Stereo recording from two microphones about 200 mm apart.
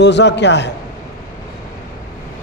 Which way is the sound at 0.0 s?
60° left (ahead or behind).